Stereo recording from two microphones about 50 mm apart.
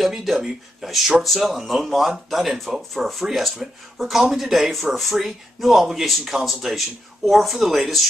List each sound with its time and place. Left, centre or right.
0.0 s speech: centre